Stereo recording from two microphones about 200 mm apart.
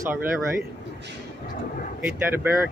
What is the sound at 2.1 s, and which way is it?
Speech, 10° right (ahead or behind).